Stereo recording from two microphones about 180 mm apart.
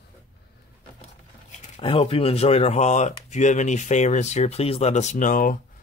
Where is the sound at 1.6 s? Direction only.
35° left (ahead or behind).